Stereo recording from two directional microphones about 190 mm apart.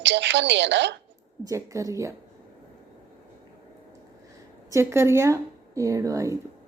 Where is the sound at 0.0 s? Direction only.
65° right (ahead or behind).